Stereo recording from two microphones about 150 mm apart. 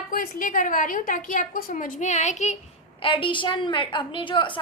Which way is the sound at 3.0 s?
35° left (ahead or behind).